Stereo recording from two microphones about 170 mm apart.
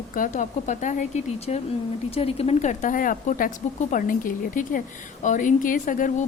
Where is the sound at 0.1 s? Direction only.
50° left (ahead or behind).